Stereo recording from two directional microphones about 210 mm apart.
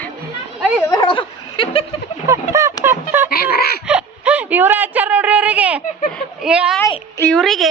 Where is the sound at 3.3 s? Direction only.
45° left (ahead or behind).